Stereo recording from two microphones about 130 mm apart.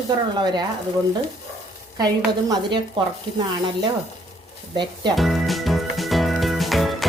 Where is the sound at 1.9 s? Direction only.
30° right (ahead or behind).